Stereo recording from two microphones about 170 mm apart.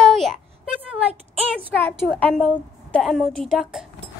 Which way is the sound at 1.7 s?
5° left (ahead or behind).